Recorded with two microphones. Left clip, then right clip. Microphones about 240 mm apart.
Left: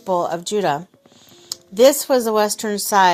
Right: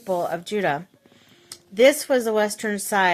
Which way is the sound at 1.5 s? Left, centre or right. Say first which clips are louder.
Left 3 dB; centre.